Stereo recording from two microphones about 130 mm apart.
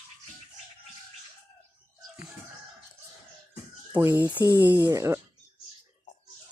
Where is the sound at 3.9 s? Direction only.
20° right (ahead or behind).